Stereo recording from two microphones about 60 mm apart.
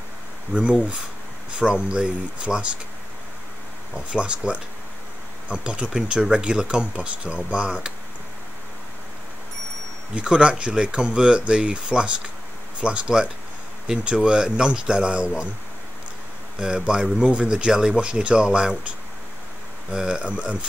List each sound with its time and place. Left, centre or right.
0.5 s speech: centre
3.9 s speech: centre
10.1 s speech: centre
16.5 s speech: centre